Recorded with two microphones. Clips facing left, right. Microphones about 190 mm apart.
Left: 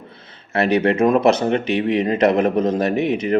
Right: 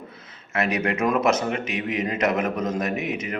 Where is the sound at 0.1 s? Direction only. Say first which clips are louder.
Left 8 dB; 30° left (ahead or behind).